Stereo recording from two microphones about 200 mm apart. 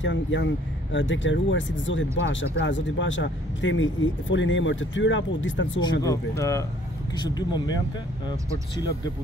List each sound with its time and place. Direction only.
0.0 s speech: 65° left (ahead or behind)
5.8 s speech: 15° left (ahead or behind)